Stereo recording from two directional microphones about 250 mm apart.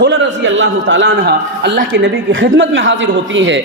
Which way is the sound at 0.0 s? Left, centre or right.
Right.